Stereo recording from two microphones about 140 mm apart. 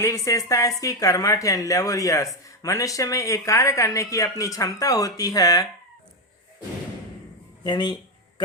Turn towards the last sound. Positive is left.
turn(degrees=30)  # may be behind; listen again after turning